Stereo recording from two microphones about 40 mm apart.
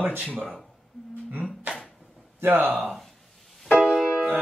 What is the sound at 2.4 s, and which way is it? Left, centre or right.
Speech, right.